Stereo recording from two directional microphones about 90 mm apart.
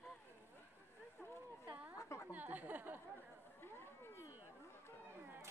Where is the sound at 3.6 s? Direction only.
25° left (ahead or behind).